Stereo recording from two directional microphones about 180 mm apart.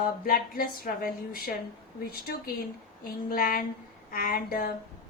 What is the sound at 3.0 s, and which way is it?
Speech, 55° left (ahead or behind).